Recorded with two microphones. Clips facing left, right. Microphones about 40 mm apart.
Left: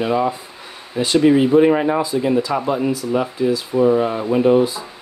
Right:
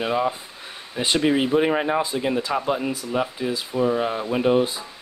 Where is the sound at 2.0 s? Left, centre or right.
Right.